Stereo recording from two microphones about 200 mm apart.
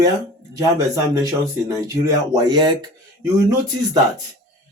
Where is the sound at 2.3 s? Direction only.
20° right (ahead or behind).